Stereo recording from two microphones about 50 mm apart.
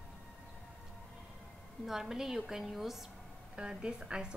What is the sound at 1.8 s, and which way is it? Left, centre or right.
A woman's voice, centre.